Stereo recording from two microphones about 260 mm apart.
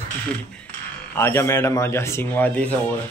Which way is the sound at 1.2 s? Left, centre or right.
Centre.